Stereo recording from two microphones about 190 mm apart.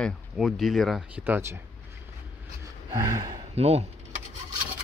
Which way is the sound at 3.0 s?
20° right (ahead or behind).